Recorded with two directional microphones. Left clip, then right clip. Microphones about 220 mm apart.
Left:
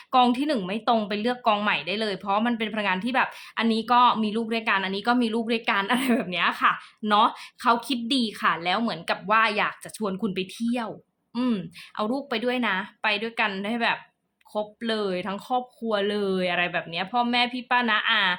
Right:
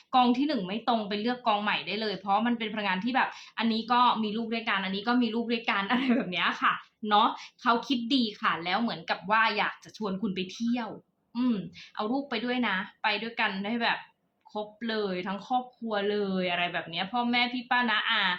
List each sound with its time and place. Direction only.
0.1 s speech: 50° left (ahead or behind)